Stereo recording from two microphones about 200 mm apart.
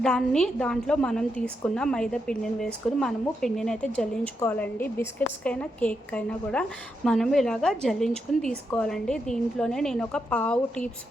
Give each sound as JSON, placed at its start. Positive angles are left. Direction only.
{"t": 0.0, "sound": "a woman's voice", "side_deg": 5}